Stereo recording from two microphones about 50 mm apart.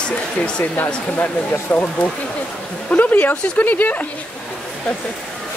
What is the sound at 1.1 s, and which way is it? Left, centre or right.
Speech, left.